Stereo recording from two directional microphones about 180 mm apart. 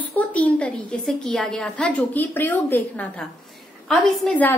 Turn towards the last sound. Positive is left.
turn(degrees=5)  # may be behind; listen again after turning